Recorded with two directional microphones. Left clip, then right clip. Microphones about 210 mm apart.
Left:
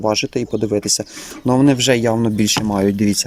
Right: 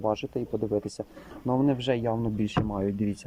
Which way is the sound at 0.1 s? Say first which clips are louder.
Left 11 dB; 5° left (ahead or behind).